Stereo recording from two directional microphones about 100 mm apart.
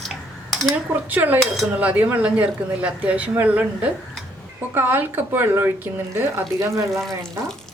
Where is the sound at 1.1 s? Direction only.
20° right (ahead or behind).